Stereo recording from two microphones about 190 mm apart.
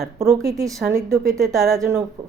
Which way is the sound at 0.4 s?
15° right (ahead or behind).